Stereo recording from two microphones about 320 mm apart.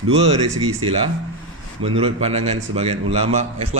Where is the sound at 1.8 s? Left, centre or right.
Centre.